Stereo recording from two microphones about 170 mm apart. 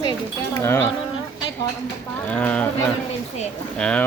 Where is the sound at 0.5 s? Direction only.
15° left (ahead or behind).